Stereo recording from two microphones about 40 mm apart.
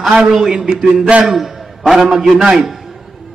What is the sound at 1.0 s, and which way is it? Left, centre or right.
Speech, right.